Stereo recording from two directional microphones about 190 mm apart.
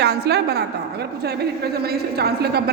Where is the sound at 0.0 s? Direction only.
60° right (ahead or behind).